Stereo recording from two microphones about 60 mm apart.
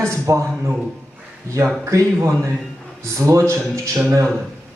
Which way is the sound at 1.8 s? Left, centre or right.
Right.